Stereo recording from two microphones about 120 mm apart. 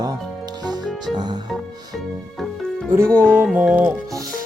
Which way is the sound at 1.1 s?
35° right (ahead or behind).